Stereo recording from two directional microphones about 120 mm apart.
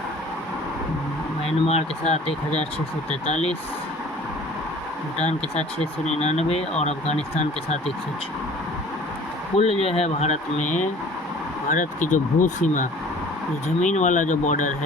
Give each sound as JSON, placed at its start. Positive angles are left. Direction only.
{"t": 1.5, "sound": "speech", "side_deg": 60}
{"t": 5.1, "sound": "speech", "side_deg": 65}
{"t": 9.6, "sound": "speech", "side_deg": 55}
{"t": 13.7, "sound": "speech", "side_deg": 75}